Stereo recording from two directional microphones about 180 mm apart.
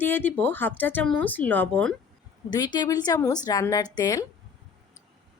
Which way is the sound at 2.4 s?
20° left (ahead or behind).